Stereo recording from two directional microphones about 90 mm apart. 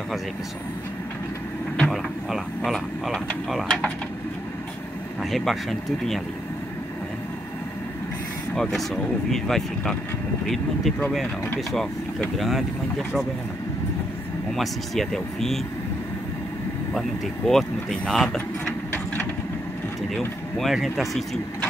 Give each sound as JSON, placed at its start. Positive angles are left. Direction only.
{"t": 1.9, "sound": "speech", "side_deg": 0}
{"t": 5.2, "sound": "speech", "side_deg": 0}
{"t": 8.5, "sound": "speech", "side_deg": 5}
{"t": 12.4, "sound": "speech", "side_deg": 0}
{"t": 14.5, "sound": "speech", "side_deg": 5}
{"t": 17.5, "sound": "speech", "side_deg": 5}
{"t": 20.2, "sound": "speech", "side_deg": 0}